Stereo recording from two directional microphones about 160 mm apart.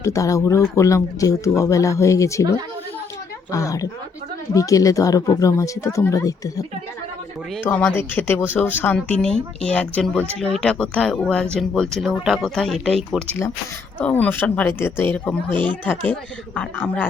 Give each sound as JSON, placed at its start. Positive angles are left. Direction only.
{"t": 0.0, "sound": "speech", "side_deg": 20}
{"t": 3.5, "sound": "speech", "side_deg": 20}
{"t": 7.7, "sound": "speech", "side_deg": 10}